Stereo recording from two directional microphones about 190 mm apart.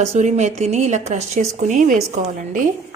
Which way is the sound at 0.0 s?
35° right (ahead or behind).